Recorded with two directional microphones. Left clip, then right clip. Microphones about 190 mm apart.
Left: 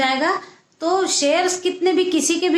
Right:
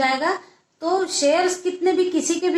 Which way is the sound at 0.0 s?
35° left (ahead or behind).